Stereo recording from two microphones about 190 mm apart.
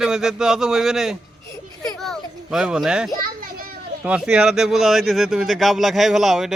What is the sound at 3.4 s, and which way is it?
Children playing, 50° right (ahead or behind).